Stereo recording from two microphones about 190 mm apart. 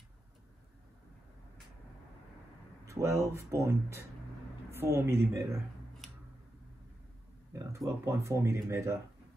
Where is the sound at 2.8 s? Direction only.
15° right (ahead or behind).